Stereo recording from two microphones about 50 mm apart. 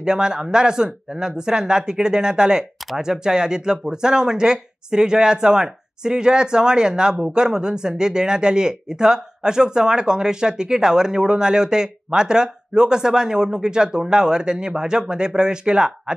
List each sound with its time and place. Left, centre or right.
0.0 s speech: centre